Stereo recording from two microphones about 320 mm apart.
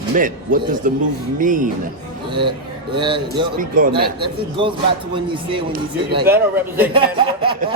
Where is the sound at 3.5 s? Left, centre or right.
Right; by 6.9 s centre.